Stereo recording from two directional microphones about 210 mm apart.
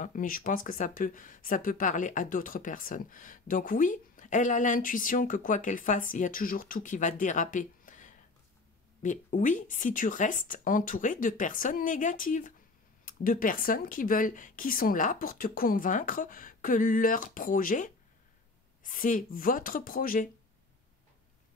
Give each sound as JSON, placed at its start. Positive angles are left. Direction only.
{"t": 0.0, "sound": "speech", "side_deg": 40}